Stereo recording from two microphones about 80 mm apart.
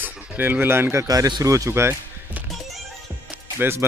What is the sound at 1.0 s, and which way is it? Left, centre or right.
Speech, right.